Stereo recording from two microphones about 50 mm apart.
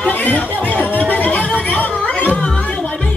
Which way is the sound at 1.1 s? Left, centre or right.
Left.